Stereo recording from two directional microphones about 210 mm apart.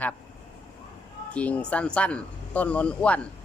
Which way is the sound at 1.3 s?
5° left (ahead or behind).